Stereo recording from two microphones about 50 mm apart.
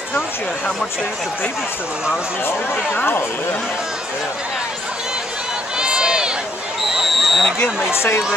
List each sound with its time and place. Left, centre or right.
2.4 s speech: left
5.8 s run: centre
6.9 s a sound: centre
7.9 s speech: left